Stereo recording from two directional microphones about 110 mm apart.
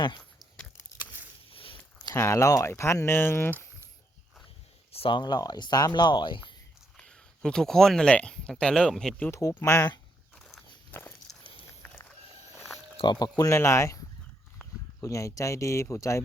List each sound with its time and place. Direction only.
0.2 s a sound: 5° left (ahead or behind)
1.5 s biting: 55° left (ahead or behind)
2.1 s speech: 25° left (ahead or behind)
4.9 s a sound: 65° left (ahead or behind)
5.1 s speech: 40° left (ahead or behind)
6.9 s speech: 5° left (ahead or behind)
9.3 s speech: 30° left (ahead or behind)
10.3 s walk: 5° left (ahead or behind)
10.9 s walk: 20° left (ahead or behind)
11.8 s a sound: 15° left (ahead or behind)
13.0 s speech: 40° left (ahead or behind); by 14.0 s 25° left (ahead or behind)
15.0 s speech: 30° left (ahead or behind)